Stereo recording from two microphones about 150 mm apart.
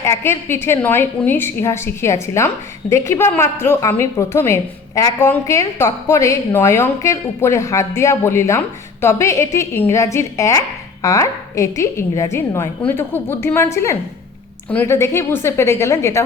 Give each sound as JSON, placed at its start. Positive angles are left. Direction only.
{"t": 0.0, "sound": "a woman's voice", "side_deg": 15}